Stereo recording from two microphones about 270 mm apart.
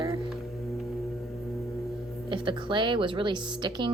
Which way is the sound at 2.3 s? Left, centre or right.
Centre.